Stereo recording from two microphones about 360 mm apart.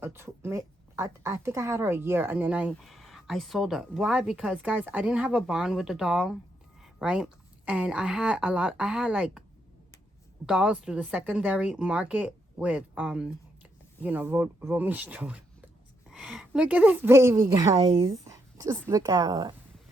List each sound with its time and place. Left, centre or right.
0.0 s a woman's voice: centre
10.4 s a woman's voice: centre